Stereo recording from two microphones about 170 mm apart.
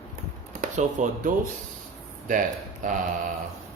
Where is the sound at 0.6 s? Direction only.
50° right (ahead or behind).